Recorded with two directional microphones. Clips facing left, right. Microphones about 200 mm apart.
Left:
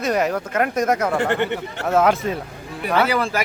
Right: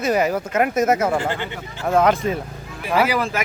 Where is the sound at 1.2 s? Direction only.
65° left (ahead or behind).